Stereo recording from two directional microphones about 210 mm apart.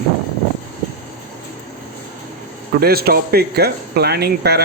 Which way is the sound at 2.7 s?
45° right (ahead or behind).